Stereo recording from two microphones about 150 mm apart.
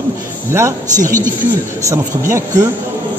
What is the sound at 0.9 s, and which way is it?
Speech, 60° right (ahead or behind).